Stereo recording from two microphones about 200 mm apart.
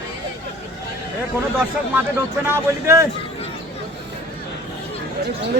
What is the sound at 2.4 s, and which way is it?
Speech, 10° right (ahead or behind).